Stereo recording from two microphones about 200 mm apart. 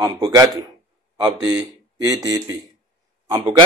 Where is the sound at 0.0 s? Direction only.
20° right (ahead or behind).